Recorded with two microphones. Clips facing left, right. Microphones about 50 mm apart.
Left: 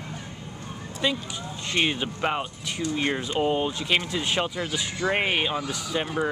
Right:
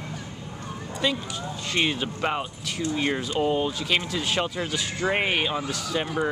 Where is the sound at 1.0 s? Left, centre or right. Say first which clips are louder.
Even; centre.